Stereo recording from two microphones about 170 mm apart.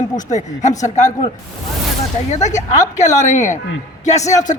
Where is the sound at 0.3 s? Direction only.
45° left (ahead or behind).